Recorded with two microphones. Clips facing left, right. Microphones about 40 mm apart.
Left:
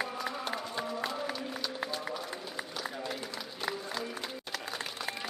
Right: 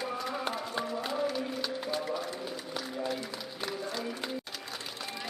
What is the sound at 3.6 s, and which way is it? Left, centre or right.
Music, centre.